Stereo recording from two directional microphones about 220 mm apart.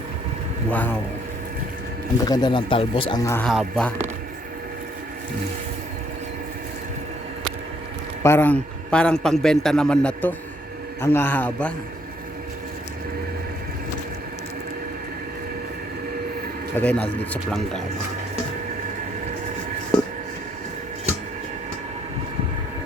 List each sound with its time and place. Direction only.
0.7 s a man's voice: 10° left (ahead or behind)
2.2 s speech: 20° left (ahead or behind)
3.2 s a man's voice: 10° left (ahead or behind)
8.2 s a man's voice: 10° left (ahead or behind)
16.7 s a man's voice: 5° left (ahead or behind)